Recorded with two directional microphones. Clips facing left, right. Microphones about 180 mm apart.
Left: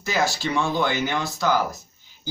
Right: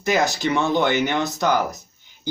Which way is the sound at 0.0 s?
20° right (ahead or behind).